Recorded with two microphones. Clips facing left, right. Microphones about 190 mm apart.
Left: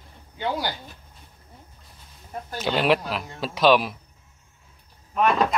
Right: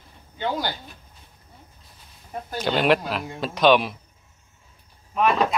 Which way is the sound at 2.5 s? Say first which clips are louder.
Right 1 dB; centre (ahead or behind).